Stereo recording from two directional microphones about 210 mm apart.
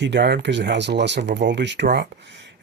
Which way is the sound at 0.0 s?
60° right (ahead or behind).